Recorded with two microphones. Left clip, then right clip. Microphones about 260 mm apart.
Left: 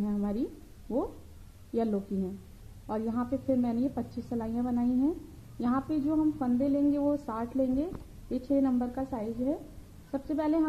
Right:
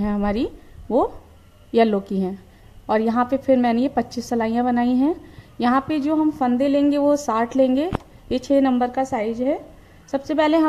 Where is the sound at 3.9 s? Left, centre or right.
Right.